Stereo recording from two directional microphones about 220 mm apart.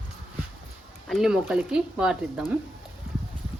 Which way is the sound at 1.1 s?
Centre (ahead or behind).